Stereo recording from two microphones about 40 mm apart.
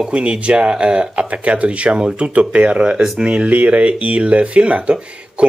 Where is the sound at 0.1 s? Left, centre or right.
Right.